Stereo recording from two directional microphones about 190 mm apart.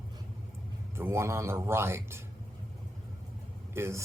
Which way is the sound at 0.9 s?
15° right (ahead or behind).